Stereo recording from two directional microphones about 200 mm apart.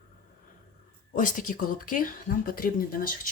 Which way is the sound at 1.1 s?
40° left (ahead or behind).